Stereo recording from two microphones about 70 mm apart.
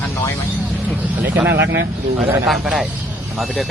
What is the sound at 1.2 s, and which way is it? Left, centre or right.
Speech, right.